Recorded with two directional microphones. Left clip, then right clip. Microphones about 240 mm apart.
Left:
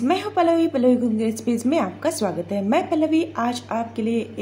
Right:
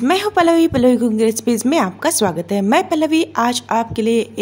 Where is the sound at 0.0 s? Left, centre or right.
Right.